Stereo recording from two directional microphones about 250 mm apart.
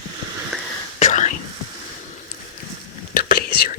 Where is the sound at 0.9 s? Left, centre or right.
Left.